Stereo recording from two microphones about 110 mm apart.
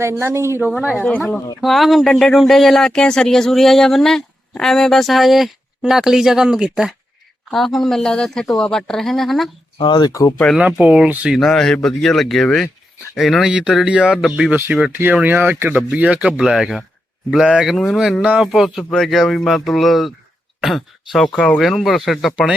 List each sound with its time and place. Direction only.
0.0 s speech: 25° right (ahead or behind)
0.8 s speech: 15° right (ahead or behind)
1.0 s speech: 5° left (ahead or behind)
9.7 s speech: 45° left (ahead or behind)
10.1 s speech: 30° left (ahead or behind)
10.3 s speech: 10° left (ahead or behind)
10.6 s speech: 10° right (ahead or behind)
11.3 s speech: 5° left (ahead or behind)